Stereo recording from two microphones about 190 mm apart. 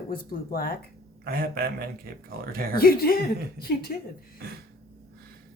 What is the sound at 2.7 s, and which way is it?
Speech, 50° left (ahead or behind).